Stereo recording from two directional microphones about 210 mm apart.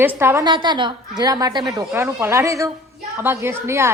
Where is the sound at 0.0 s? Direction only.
10° right (ahead or behind).